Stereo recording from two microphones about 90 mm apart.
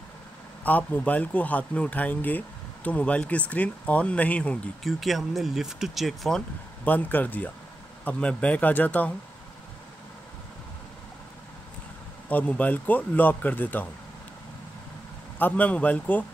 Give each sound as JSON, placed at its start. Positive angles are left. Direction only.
{"t": 0.7, "sound": "speech", "side_deg": 20}
{"t": 4.8, "sound": "speech", "side_deg": 0}
{"t": 6.8, "sound": "speech", "side_deg": 20}
{"t": 12.3, "sound": "speech", "side_deg": 15}
{"t": 15.3, "sound": "speech", "side_deg": 20}